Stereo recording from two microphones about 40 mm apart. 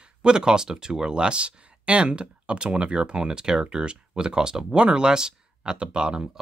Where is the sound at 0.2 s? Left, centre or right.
Right.